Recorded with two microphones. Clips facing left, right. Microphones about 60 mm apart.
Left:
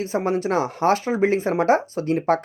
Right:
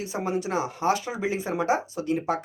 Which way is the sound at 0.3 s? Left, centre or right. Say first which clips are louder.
Left 4 dB; left.